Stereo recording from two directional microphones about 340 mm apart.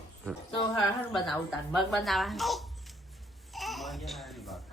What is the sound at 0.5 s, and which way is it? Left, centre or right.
Speech, centre.